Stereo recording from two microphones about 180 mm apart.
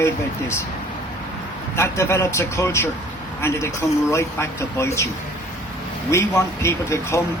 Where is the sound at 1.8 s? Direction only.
15° left (ahead or behind).